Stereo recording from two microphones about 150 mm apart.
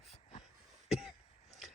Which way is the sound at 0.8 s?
5° right (ahead or behind).